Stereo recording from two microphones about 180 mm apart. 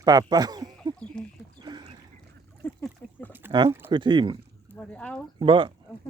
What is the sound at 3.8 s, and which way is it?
Speech, 25° right (ahead or behind).